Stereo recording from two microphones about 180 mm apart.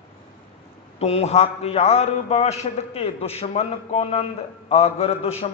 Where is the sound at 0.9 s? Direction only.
35° left (ahead or behind).